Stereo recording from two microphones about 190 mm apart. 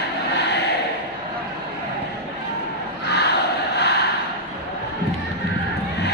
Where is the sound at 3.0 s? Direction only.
60° left (ahead or behind).